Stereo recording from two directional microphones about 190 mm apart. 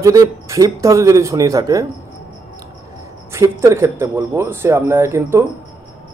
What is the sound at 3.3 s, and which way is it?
Speech, 15° right (ahead or behind).